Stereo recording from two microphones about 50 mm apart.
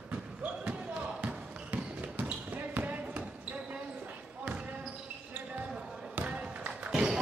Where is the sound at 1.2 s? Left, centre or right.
Right.